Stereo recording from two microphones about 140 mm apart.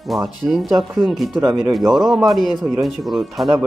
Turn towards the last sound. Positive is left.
turn(degrees=0)  # may be behind; listen again after turning